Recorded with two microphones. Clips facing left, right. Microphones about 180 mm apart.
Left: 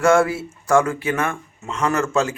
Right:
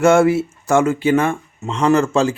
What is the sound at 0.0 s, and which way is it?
Speech, 25° right (ahead or behind).